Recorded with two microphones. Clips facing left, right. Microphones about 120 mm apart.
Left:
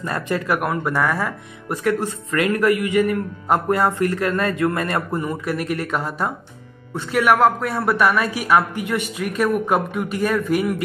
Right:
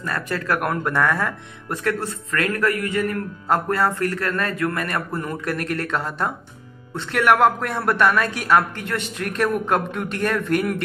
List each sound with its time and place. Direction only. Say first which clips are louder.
0.0 s a man's voice: left 3 dB; 20° left (ahead or behind)
0.6 s speech: even; 5° left (ahead or behind); by 5.2 s 25° left (ahead or behind)
5.2 s speech: left 2 dB; 10° left (ahead or behind)